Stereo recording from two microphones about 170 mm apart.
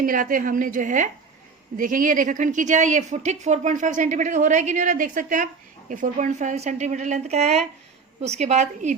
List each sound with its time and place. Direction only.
0.0 s a woman's voice: 55° right (ahead or behind)